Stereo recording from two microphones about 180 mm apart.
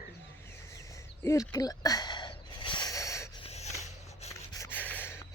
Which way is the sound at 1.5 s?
20° left (ahead or behind).